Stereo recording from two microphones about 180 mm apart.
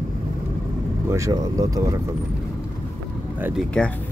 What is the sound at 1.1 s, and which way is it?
Speech, 15° right (ahead or behind).